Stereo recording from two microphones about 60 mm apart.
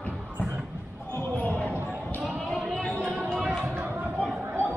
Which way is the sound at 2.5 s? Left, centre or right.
Centre.